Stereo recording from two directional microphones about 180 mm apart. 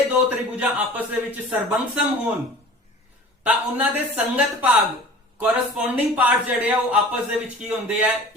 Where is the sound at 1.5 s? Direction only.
5° right (ahead or behind).